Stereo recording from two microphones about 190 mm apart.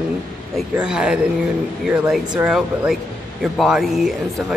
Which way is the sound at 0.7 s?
5° right (ahead or behind).